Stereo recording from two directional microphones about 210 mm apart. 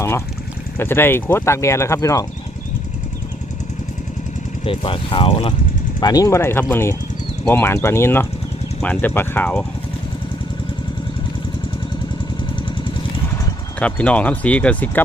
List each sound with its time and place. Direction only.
0.8 s speech: 10° left (ahead or behind)
4.6 s speech: 25° left (ahead or behind); by 9.6 s 5° left (ahead or behind)
13.7 s speech: 5° left (ahead or behind)